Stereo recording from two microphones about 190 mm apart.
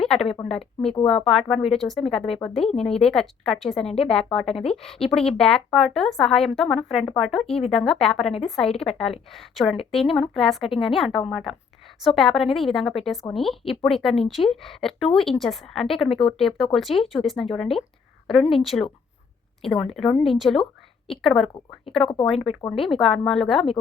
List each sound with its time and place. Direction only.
0.0 s speech: centre (ahead or behind)
2.6 s speech: 30° left (ahead or behind)
3.0 s speech: 5° left (ahead or behind)
21.9 s speech: 30° left (ahead or behind)
22.3 s speech: centre (ahead or behind)